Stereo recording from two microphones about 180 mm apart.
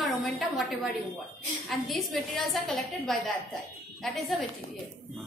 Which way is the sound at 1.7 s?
Centre (ahead or behind).